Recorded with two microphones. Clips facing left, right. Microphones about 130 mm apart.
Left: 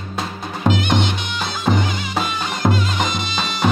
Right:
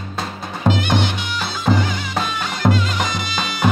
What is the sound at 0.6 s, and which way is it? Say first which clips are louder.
Music: even; 20° left (ahead or behind).